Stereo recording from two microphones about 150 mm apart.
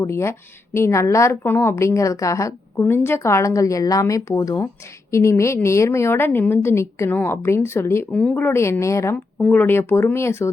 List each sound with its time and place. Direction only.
0.0 s a woman's voice: 15° left (ahead or behind)
8.1 s a woman's voice: 5° left (ahead or behind)